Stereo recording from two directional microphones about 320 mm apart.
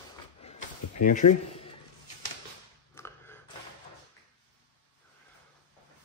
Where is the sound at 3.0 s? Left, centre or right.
Centre.